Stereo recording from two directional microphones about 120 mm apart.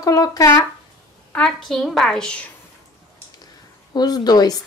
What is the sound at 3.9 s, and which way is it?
Speech, 35° left (ahead or behind).